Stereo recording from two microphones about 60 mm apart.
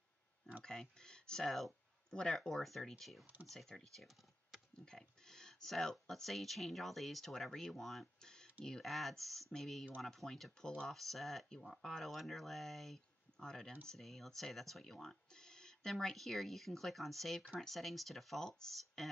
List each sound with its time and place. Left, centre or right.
0.7 s speech: centre
8.2 s a sound: centre
8.6 s speech: centre